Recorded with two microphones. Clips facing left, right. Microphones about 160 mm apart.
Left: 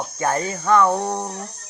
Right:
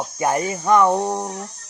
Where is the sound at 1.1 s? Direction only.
10° right (ahead or behind).